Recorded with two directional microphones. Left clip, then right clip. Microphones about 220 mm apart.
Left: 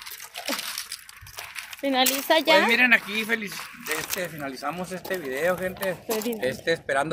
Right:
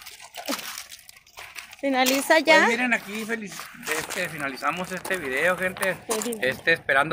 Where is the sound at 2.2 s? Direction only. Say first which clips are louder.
Right 2 dB; 10° right (ahead or behind).